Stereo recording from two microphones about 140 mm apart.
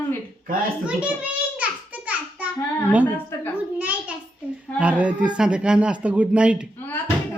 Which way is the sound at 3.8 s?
10° right (ahead or behind).